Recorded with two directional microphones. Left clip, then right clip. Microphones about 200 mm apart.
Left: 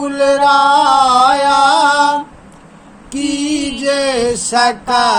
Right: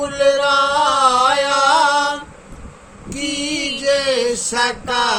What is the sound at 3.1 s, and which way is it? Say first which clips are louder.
Mantra: left 4 dB; 20° left (ahead or behind).